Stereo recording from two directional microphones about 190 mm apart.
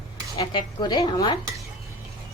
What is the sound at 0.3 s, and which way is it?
Speech, 20° left (ahead or behind).